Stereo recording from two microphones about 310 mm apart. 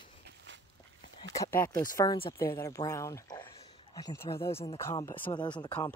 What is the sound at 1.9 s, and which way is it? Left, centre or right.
Speech, centre.